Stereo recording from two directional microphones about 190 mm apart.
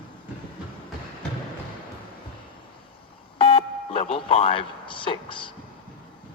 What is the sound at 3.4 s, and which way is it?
Telephone dialing, 30° left (ahead or behind).